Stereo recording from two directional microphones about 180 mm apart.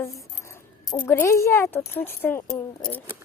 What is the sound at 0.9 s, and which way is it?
Speech, 10° left (ahead or behind).